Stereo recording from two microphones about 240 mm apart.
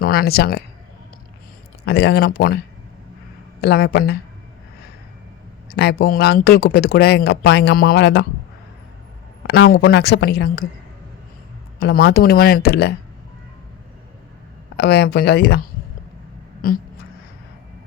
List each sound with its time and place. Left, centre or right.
0.0 s speech: left
1.8 s speech: left
3.6 s speech: left
5.6 s speech: left
9.5 s speech: left
11.8 s speech: left
14.8 s speech: left
16.6 s speech: left